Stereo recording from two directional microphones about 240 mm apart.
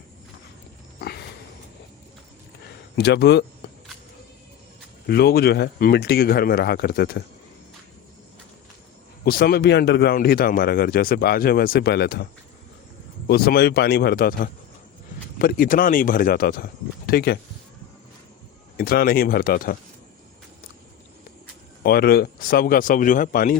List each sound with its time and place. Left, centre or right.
0.9 s a sound: left
2.9 s speech: left
5.0 s speech: left
9.2 s speech: left
18.8 s speech: left
21.8 s speech: left